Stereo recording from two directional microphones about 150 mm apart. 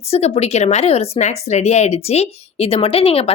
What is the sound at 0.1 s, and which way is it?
A woman's voice, 45° left (ahead or behind).